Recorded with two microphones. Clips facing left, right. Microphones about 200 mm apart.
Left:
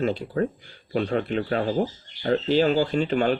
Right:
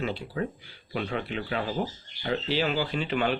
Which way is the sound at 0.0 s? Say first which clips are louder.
Left 6 dB; 45° left (ahead or behind).